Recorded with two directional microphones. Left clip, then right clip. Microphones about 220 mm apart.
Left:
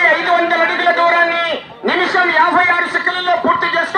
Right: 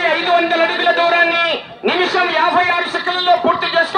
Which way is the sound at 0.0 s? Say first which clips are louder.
Left 2 dB; 25° right (ahead or behind).